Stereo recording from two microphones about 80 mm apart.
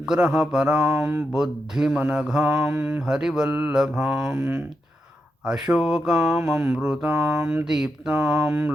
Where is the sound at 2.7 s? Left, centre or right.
Right.